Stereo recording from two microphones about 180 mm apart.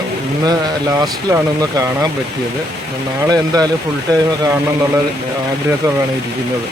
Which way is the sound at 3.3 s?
20° right (ahead or behind).